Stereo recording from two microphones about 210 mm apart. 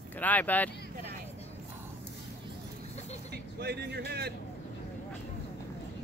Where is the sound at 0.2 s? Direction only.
10° left (ahead or behind).